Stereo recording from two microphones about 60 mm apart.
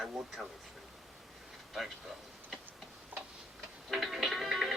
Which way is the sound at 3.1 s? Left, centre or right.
Right.